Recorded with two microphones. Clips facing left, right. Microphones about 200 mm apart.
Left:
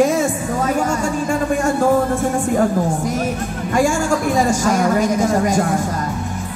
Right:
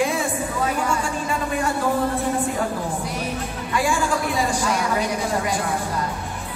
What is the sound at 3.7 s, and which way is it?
A woman's voice, 45° left (ahead or behind).